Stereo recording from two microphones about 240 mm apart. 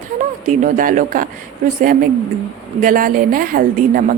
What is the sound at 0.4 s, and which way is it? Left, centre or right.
Speech, right.